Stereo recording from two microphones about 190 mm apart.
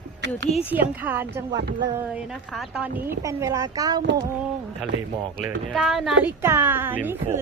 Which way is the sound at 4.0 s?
65° right (ahead or behind).